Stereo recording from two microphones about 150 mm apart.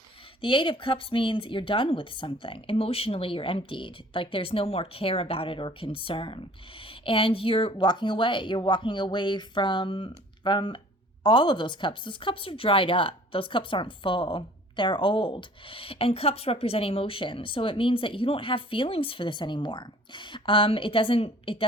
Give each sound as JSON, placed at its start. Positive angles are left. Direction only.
{"t": 0.4, "sound": "speech", "side_deg": 35}